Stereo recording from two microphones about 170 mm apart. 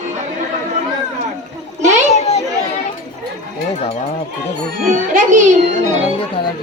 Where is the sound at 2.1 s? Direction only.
40° left (ahead or behind).